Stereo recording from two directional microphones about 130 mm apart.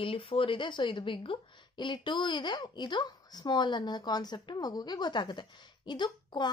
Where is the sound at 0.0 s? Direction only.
45° left (ahead or behind).